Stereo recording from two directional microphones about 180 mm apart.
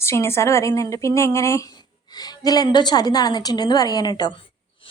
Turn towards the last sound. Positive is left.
turn(degrees=20)  # may be behind; listen again after turning